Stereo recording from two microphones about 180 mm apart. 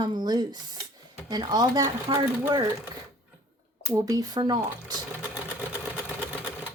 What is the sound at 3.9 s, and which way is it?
Speech, 20° right (ahead or behind).